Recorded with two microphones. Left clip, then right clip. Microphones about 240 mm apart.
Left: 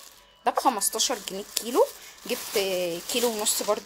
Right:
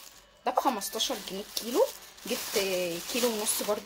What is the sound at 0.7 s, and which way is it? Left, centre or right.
Speech, left.